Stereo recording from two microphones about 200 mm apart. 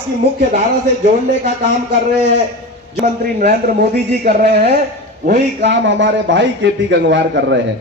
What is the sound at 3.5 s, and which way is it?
A man's voice, 50° right (ahead or behind).